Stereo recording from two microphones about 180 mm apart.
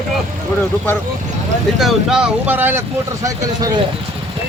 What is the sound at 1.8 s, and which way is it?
Speech, centre (ahead or behind).